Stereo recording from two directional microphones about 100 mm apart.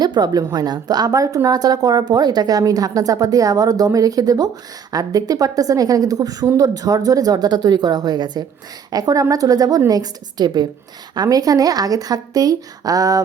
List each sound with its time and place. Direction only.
0.0 s a woman's voice: 45° right (ahead or behind)